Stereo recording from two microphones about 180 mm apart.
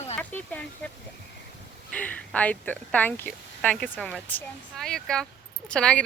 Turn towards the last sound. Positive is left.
turn(degrees=5)  # may be behind; listen again after turning